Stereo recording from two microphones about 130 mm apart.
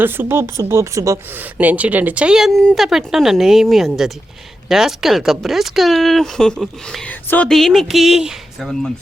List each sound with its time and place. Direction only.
0.0 s a woman's voice: 15° right (ahead or behind)
1.5 s speech: 10° right (ahead or behind); by 7.5 s 10° left (ahead or behind)
7.5 s speech: centre (ahead or behind)